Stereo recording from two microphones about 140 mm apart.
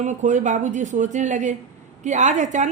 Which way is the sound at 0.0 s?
60° right (ahead or behind).